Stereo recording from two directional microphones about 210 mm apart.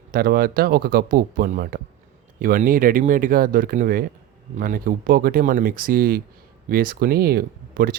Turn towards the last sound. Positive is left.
turn(degrees=-45)  # may be behind; listen again after turning